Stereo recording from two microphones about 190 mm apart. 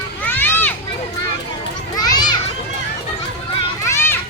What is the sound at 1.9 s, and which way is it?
Children playing, 20° left (ahead or behind).